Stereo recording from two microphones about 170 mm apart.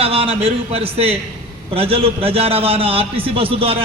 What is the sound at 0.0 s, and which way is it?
A man's voice, 35° right (ahead or behind).